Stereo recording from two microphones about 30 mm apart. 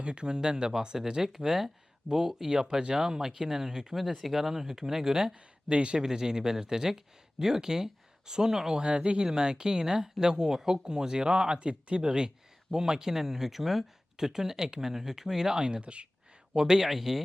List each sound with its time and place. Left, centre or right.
0.0 s speech: right
1.5 s speech: centre
3.9 s speech: centre
5.3 s speech: right
6.0 s speech: right
8.8 s speech: right
11.6 s speech: right
12.0 s speech: right
15.8 s speech: right
16.5 s speech: right
16.9 s speech: centre